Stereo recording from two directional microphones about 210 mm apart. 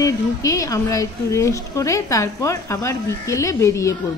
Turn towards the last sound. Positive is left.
turn(degrees=15)  # may be behind; listen again after turning